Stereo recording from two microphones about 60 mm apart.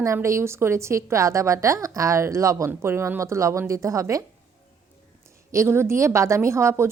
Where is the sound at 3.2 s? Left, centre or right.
Right.